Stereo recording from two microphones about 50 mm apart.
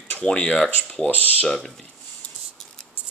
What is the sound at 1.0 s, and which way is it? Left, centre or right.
Speech, left.